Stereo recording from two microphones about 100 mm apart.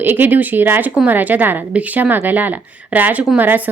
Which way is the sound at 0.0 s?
20° right (ahead or behind).